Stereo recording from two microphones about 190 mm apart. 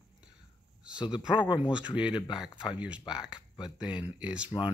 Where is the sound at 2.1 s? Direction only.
25° left (ahead or behind).